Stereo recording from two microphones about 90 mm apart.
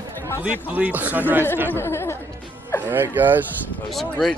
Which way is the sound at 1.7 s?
30° left (ahead or behind).